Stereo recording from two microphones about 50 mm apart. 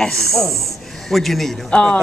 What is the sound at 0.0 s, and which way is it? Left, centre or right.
Speech, centre.